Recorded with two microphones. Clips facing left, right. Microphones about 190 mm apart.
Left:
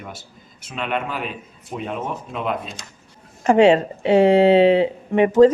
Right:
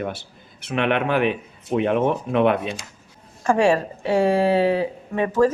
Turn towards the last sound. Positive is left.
turn(degrees=20)  # may be behind; listen again after turning